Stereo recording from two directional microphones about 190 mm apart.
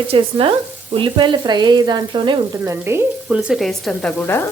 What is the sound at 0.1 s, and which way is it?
Speech, 30° right (ahead or behind).